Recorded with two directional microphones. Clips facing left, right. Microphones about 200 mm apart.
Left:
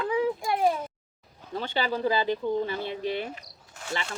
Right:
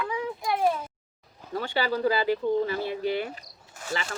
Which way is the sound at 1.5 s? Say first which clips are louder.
Right 1 dB; 25° left (ahead or behind).